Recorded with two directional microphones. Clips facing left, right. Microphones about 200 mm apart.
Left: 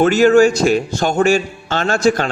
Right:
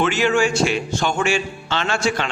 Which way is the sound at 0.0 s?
40° left (ahead or behind).